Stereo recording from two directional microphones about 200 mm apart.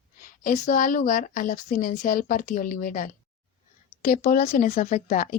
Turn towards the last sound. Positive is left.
turn(degrees=40)  # may be behind; listen again after turning